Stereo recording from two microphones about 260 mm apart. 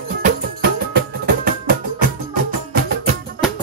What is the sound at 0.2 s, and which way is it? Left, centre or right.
Music, right.